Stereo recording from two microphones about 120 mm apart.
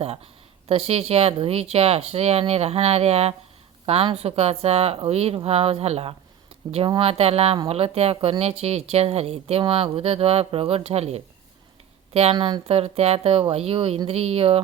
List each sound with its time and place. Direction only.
0.7 s a woman's voice: 55° right (ahead or behind); by 12.6 s 40° right (ahead or behind)
12.6 s speech: 55° right (ahead or behind)